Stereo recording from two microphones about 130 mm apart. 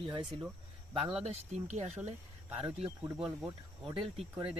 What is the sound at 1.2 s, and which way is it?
Speech, 60° right (ahead or behind).